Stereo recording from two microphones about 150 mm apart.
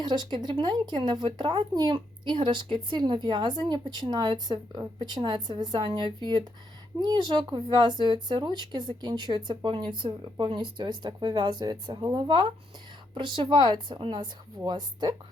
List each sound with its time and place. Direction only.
0.0 s speech: 30° right (ahead or behind)